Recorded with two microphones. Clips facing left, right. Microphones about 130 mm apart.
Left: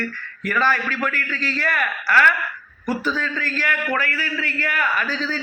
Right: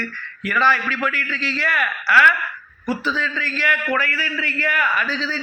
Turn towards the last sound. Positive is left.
turn(degrees=50)  # may be behind; listen again after turning